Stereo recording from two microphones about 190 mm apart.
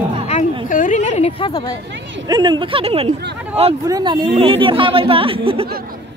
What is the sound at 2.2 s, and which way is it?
A man's voice, 20° right (ahead or behind).